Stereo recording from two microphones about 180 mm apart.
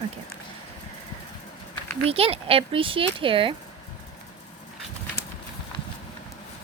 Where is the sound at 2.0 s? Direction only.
30° right (ahead or behind).